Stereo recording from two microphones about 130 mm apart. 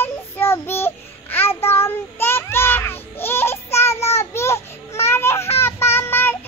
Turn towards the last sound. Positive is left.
turn(degrees=15)  # may be behind; listen again after turning